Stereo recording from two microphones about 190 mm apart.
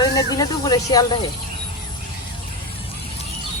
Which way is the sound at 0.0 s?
20° left (ahead or behind).